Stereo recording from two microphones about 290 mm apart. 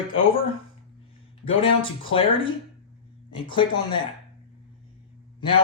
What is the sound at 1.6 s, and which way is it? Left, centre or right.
Speech, centre.